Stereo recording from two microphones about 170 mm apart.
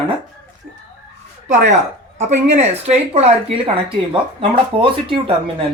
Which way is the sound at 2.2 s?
40° right (ahead or behind).